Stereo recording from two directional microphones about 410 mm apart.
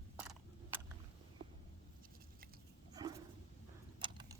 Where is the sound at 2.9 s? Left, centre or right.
Centre.